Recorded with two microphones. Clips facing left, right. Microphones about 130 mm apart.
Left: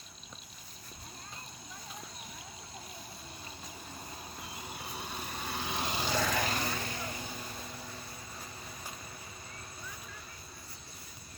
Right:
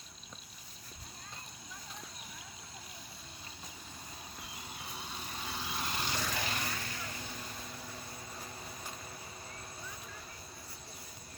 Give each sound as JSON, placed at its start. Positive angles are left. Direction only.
{"t": 4.9, "sound": "vehicle", "side_deg": 55}
{"t": 6.4, "sound": "vehicle", "side_deg": 40}
{"t": 7.2, "sound": "vehicle", "side_deg": 10}